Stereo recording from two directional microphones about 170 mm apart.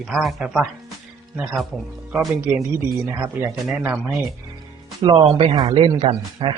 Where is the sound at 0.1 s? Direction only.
Centre (ahead or behind).